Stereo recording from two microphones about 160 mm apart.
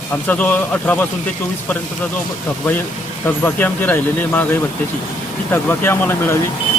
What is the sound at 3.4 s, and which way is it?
Speech, 10° left (ahead or behind).